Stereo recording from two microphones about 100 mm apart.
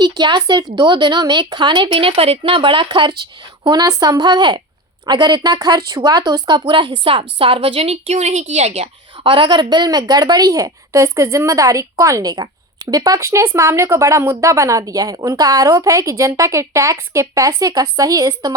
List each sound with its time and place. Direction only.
0.0 s speech: 50° right (ahead or behind)
3.7 s a woman's voice: 40° right (ahead or behind)
6.7 s a woman's voice: 55° right (ahead or behind); by 18.5 s 35° right (ahead or behind)